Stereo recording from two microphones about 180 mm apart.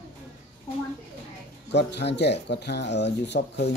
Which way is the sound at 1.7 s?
70° left (ahead or behind).